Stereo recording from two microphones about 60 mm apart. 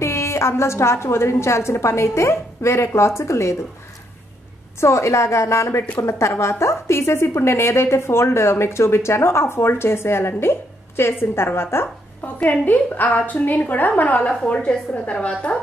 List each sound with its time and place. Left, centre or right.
0.0 s a woman's voice: left
4.7 s a woman's voice: left
12.4 s a woman's voice: left